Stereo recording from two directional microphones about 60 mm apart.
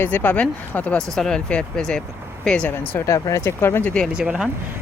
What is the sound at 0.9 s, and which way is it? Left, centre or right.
Speech, centre.